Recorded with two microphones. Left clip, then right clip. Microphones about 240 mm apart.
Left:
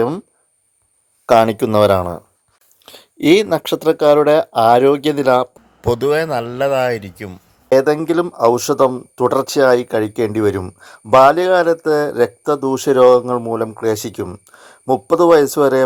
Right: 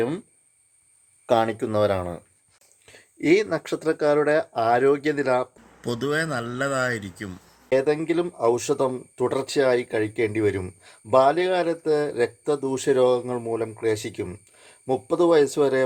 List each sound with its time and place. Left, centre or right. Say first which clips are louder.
1.3 s speech: left 10 dB; left